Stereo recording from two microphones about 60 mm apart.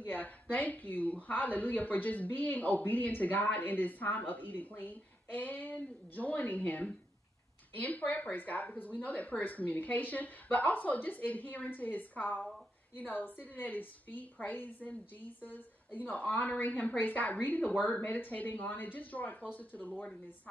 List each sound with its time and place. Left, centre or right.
0.0 s speech: left